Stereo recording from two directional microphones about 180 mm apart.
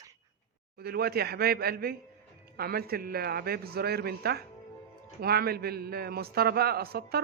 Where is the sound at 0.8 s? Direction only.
60° right (ahead or behind).